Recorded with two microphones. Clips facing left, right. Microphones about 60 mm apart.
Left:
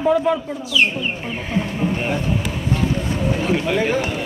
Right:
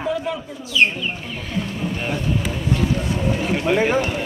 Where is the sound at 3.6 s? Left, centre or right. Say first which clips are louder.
Right 1 dB; centre.